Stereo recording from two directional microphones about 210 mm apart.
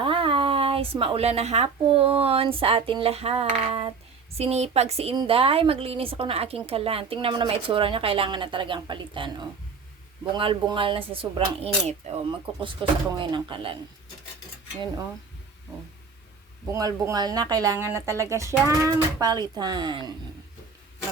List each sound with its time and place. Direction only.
0.0 s speech: 25° right (ahead or behind)
16.7 s speech: 15° right (ahead or behind)